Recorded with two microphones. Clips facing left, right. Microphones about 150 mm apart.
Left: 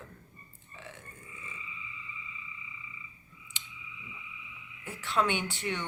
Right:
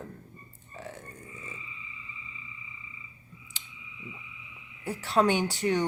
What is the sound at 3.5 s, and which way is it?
Clicking, 35° right (ahead or behind).